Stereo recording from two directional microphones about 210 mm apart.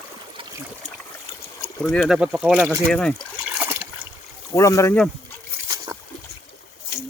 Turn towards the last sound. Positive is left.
turn(degrees=-15)  # may be behind; listen again after turning